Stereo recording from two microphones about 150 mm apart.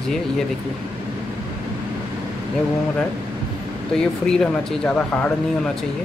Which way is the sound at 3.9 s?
5° left (ahead or behind).